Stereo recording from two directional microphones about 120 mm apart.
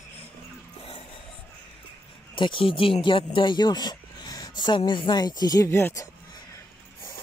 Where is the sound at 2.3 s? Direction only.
45° left (ahead or behind).